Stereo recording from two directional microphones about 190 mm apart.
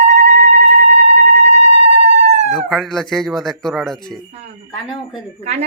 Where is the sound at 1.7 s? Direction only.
35° right (ahead or behind).